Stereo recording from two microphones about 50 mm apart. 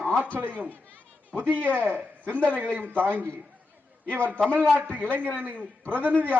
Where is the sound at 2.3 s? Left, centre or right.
Left.